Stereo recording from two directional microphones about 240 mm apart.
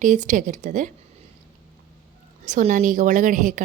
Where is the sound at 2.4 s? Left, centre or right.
Right.